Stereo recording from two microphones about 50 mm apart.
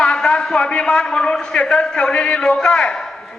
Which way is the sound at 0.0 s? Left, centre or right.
Centre.